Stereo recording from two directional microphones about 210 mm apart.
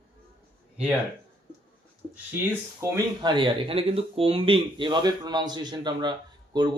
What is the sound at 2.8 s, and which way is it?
Speech, 15° right (ahead or behind).